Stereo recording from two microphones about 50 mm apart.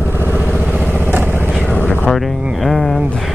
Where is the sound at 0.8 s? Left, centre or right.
Right.